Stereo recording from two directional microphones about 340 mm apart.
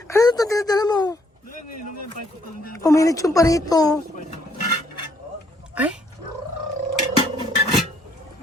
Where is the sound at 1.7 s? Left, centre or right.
Left.